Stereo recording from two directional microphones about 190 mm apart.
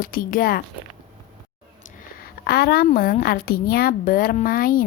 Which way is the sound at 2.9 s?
45° left (ahead or behind).